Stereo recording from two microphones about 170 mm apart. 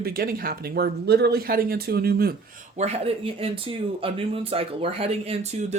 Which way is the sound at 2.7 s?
40° right (ahead or behind).